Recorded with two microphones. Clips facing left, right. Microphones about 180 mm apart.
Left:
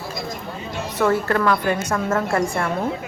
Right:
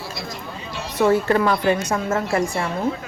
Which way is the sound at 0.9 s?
15° right (ahead or behind).